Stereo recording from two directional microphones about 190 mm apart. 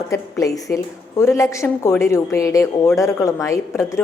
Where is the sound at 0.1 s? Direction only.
15° left (ahead or behind).